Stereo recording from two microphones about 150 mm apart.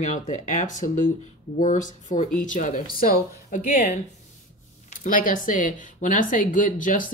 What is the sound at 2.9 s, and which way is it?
Speech, 70° left (ahead or behind).